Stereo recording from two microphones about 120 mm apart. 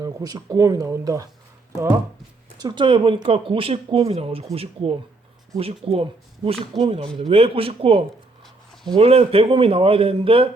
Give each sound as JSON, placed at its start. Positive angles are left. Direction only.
{"t": 0.0, "sound": "speech", "side_deg": -30}
{"t": 2.6, "sound": "speech", "side_deg": -35}